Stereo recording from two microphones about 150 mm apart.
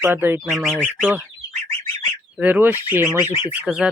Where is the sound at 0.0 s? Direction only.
15° right (ahead or behind).